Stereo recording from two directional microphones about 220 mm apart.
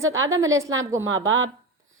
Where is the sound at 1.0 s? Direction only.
65° right (ahead or behind).